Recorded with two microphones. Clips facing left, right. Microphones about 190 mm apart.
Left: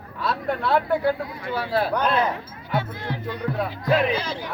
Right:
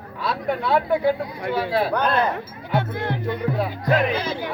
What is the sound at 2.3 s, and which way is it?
Speech, 55° right (ahead or behind).